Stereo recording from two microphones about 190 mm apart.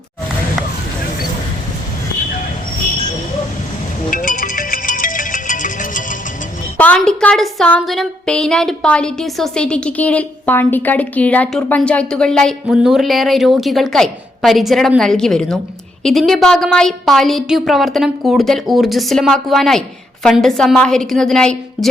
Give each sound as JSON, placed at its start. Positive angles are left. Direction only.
{"t": 4.1, "sound": "music", "side_deg": 45}
{"t": 6.7, "sound": "a woman's voice", "side_deg": 5}